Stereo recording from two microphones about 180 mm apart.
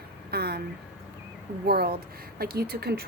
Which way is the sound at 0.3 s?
60° right (ahead or behind).